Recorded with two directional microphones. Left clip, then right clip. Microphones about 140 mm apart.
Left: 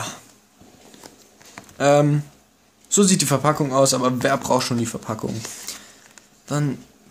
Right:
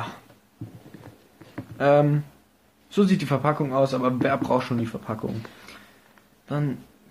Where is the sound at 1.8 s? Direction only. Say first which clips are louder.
Left 2 dB; 15° left (ahead or behind).